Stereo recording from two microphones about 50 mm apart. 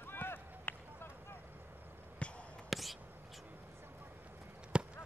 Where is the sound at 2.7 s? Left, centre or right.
Centre.